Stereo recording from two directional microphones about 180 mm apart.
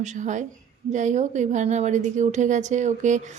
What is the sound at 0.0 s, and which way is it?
Speech, 45° right (ahead or behind).